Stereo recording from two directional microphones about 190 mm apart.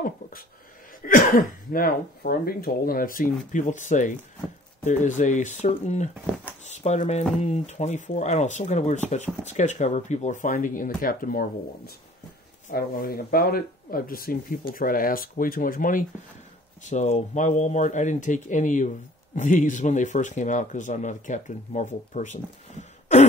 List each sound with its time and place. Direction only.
1.0 s speech: 45° left (ahead or behind)